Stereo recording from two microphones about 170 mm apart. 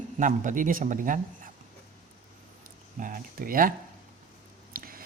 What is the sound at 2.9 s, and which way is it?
Speech, 55° right (ahead or behind).